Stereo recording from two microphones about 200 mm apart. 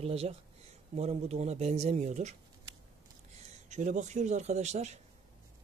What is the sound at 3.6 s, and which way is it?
Speech, 35° right (ahead or behind).